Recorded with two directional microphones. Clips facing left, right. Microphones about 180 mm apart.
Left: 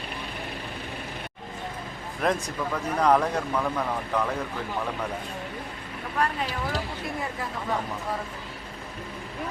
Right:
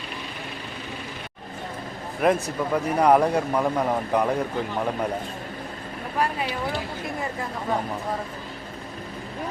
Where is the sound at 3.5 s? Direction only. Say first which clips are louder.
Right 5 dB; 20° right (ahead or behind).